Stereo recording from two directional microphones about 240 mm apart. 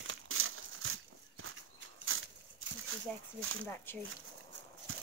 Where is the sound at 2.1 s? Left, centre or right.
Right.